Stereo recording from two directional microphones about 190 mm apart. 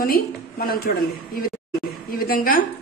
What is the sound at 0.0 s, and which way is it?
Speech, 50° left (ahead or behind).